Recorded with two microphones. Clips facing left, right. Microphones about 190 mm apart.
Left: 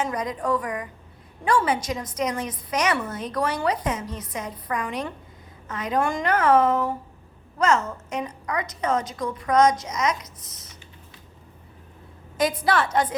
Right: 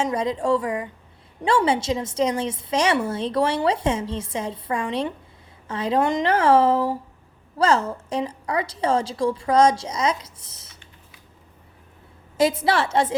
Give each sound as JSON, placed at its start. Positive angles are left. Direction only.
{"t": 0.0, "sound": "a woman's voice", "side_deg": -25}
{"t": 12.4, "sound": "a woman's voice", "side_deg": -25}